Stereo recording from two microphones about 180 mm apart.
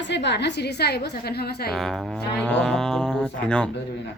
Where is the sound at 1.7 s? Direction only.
Centre (ahead or behind).